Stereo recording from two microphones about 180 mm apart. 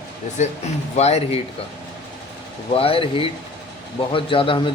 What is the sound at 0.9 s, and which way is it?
Speech, 35° left (ahead or behind).